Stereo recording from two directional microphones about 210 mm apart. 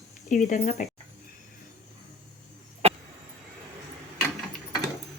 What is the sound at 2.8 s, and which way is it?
Vehicle, 30° right (ahead or behind).